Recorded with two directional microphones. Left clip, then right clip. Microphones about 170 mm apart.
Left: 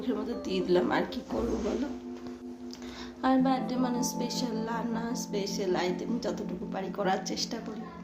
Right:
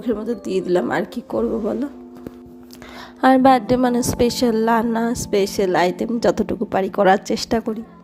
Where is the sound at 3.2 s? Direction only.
55° right (ahead or behind).